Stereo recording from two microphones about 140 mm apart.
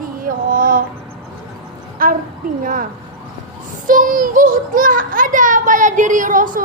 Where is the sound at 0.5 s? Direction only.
85° right.